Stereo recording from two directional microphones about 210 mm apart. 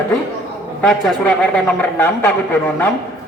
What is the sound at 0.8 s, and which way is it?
A man's voice, 5° left (ahead or behind).